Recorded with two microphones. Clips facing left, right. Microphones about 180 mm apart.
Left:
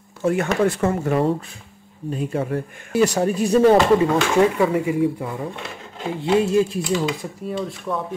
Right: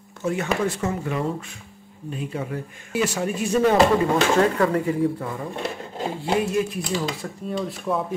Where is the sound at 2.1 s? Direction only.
45° left (ahead or behind).